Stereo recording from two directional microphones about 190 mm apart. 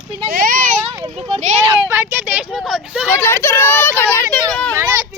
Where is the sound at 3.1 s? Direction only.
15° left (ahead or behind).